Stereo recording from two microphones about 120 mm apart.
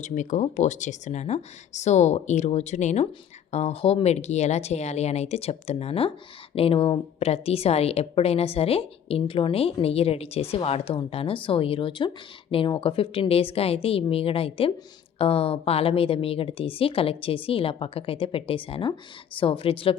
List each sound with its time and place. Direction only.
0.0 s a woman's voice: 90° left; by 20.0 s 50° left (ahead or behind)